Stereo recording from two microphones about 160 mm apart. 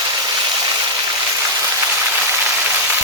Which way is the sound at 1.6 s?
10° right (ahead or behind).